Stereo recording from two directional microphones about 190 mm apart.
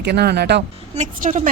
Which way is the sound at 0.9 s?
40° right (ahead or behind).